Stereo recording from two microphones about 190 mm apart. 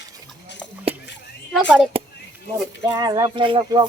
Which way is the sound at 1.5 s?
Centre (ahead or behind).